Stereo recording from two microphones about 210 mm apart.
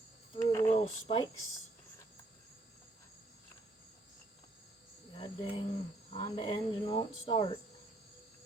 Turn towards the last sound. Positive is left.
turn(degrees=25)  # may be behind; listen again after turning